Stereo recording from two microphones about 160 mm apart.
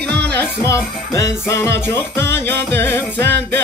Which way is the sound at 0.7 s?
20° left (ahead or behind).